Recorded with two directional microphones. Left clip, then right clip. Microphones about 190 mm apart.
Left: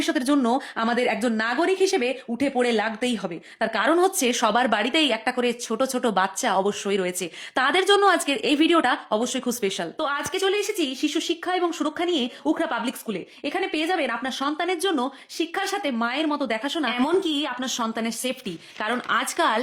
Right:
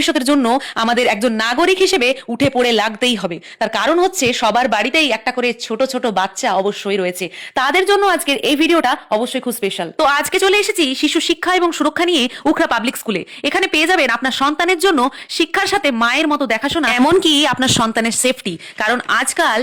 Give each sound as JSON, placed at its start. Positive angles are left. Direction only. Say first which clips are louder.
{"t": 0.0, "sound": "a woman's voice", "louder": "right 8 dB", "side_deg": -35}
{"t": 10.0, "sound": "speech", "louder": "right 12 dB", "side_deg": -40}